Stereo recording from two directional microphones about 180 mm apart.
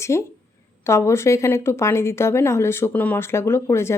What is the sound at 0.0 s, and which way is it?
A woman's voice, 15° left (ahead or behind).